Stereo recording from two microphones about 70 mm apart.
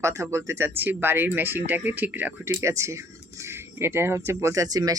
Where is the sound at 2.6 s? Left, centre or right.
Right.